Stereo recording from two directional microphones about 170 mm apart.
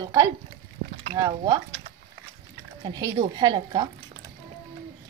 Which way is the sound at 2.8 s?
20° right (ahead or behind).